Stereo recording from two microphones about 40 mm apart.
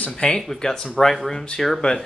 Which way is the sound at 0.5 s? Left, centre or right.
Centre.